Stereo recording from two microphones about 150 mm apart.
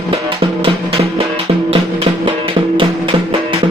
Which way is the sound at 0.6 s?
40° right (ahead or behind).